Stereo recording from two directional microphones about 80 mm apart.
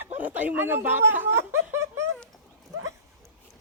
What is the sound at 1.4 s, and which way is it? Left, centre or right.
Laughter, right.